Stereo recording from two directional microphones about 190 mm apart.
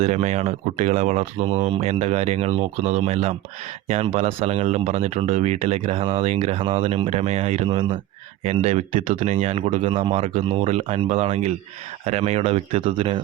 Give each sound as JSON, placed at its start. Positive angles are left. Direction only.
{"t": 0.0, "sound": "speech", "side_deg": -35}